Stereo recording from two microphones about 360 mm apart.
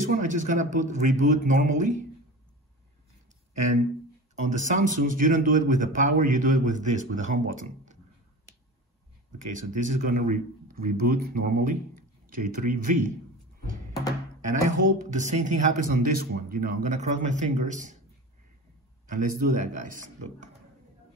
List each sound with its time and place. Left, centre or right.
0.0 s speech: right
4.4 s speech: centre
9.5 s speech: right
14.5 s speech: right
19.0 s speech: right